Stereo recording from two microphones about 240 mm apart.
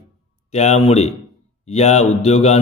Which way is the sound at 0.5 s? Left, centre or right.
Left.